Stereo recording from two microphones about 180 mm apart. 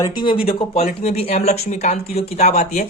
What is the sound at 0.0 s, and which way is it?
Speech, 25° left (ahead or behind).